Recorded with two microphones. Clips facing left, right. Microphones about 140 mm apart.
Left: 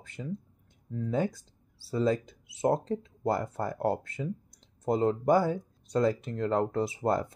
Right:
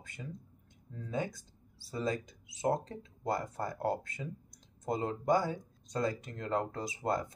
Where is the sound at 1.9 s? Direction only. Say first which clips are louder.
Left 8 dB; 25° left (ahead or behind).